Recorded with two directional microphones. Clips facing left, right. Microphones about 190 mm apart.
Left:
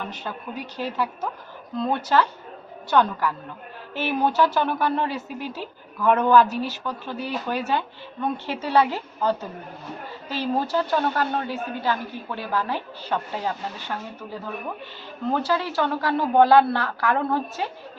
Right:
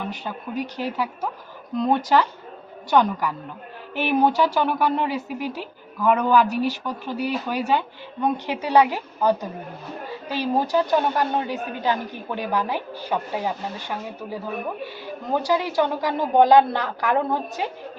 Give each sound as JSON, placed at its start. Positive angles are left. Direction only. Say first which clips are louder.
{"t": 0.1, "sound": "speech", "louder": "right 3 dB", "side_deg": -15}